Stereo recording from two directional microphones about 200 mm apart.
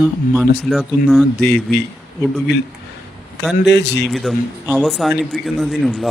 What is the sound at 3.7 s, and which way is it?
Speech, 60° left (ahead or behind).